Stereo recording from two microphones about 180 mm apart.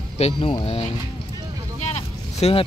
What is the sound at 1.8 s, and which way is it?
Vehicle, 35° left (ahead or behind).